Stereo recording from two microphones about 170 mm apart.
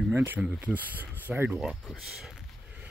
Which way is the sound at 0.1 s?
10° right (ahead or behind).